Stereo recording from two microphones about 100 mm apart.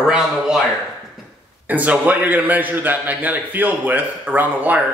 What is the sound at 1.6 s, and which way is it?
A man's voice, 15° right (ahead or behind).